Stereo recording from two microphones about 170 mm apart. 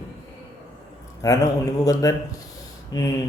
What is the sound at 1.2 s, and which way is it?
Speech, 20° left (ahead or behind).